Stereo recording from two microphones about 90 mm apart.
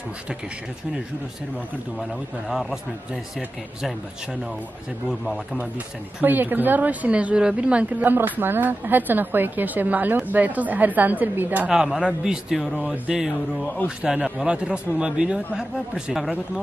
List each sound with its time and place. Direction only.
2.0 s a man's voice: centre (ahead or behind)
6.2 s a woman's voice: 20° right (ahead or behind)
11.7 s speech: 5° right (ahead or behind)
12.7 s a man's voice: 15° right (ahead or behind)